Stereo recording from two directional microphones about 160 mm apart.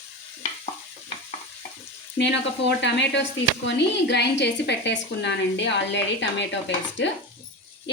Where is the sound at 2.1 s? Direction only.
90° left.